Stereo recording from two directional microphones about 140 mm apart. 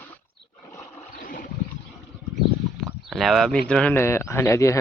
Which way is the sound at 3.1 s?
Centre (ahead or behind).